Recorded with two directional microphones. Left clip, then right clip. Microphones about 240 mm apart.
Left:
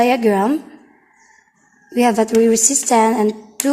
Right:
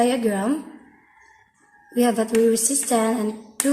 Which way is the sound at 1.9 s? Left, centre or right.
Left.